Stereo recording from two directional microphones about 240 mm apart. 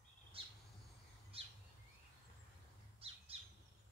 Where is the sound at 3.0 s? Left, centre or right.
Right.